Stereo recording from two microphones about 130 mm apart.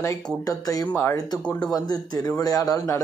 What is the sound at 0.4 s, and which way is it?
Speech, 30° left (ahead or behind).